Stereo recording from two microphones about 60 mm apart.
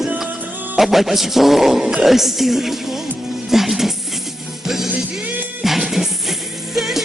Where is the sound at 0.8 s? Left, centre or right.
Centre.